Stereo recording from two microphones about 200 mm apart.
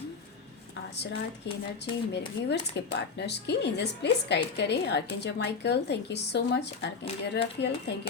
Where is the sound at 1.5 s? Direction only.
60° left (ahead or behind).